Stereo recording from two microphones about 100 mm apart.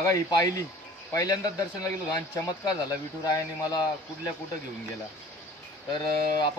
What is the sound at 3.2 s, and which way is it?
Speech, 40° left (ahead or behind).